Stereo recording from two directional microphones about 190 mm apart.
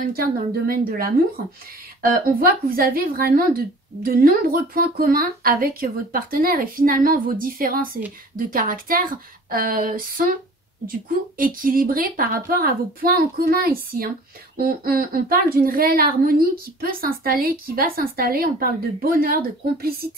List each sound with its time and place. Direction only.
0.0 s a woman's voice: 50° right (ahead or behind)